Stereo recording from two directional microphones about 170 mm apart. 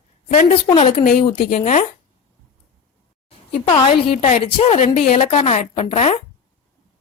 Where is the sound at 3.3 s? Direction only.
35° left (ahead or behind).